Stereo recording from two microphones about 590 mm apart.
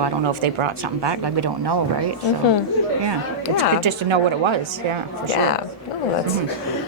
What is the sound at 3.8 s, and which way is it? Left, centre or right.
Speech, right.